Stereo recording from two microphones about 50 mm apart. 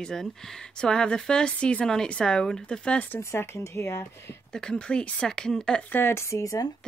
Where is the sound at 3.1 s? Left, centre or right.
Left.